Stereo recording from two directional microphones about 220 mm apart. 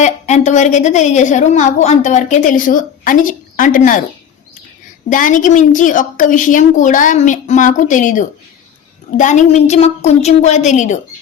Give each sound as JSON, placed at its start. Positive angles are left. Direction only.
{"t": 0.0, "sound": "a woman's voice", "side_deg": 30}
{"t": 5.0, "sound": "a woman's voice", "side_deg": 35}